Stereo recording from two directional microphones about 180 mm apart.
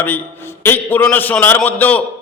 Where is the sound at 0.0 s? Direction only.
10° left (ahead or behind).